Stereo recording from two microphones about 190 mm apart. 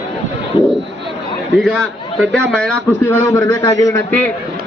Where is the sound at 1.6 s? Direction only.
Centre (ahead or behind).